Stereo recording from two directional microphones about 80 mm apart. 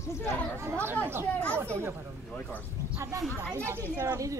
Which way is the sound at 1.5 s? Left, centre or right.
Right.